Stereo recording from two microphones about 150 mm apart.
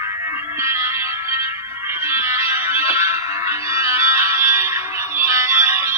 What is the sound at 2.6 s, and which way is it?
Music, 40° left (ahead or behind).